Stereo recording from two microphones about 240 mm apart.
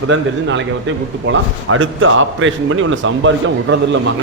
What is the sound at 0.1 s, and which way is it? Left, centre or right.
A man's voice, right.